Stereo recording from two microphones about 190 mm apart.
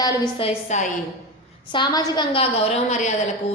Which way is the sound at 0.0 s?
25° left (ahead or behind).